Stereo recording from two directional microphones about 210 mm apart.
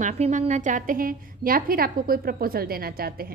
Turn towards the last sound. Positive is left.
turn(degrees=-45)  # may be behind; listen again after turning